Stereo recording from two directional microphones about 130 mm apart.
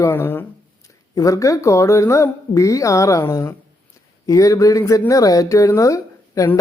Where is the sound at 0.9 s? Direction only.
25° left (ahead or behind).